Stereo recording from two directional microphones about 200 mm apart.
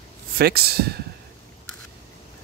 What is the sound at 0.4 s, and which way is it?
Speech, 50° right (ahead or behind).